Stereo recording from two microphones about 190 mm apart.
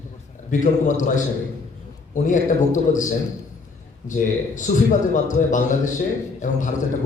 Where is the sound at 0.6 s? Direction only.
40° left (ahead or behind).